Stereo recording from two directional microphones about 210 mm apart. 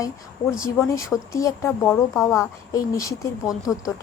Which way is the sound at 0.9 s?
15° left (ahead or behind).